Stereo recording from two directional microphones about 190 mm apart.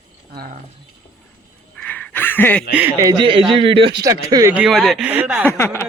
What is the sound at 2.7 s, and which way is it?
Speech, 15° right (ahead or behind).